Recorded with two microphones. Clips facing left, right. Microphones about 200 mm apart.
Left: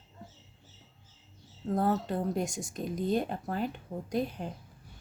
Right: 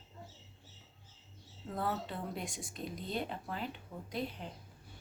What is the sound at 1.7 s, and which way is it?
Speech, 45° left (ahead or behind).